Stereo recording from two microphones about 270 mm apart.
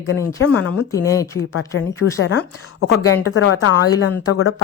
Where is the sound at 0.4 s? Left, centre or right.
Left.